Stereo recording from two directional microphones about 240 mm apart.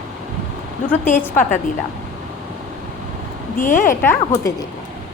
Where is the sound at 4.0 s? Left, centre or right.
Centre.